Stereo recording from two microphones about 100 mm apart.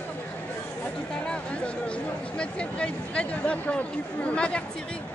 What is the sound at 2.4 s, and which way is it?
Speech, 10° left (ahead or behind).